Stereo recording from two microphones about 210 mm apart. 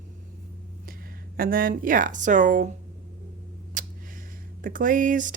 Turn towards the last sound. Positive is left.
turn(degrees=-40)  # may be behind; listen again after turning